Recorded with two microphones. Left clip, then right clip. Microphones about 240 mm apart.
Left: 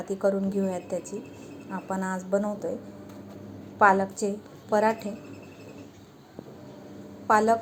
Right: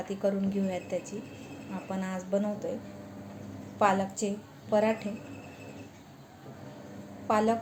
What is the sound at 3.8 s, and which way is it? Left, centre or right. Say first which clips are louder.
A woman's voice: left 6 dB; centre.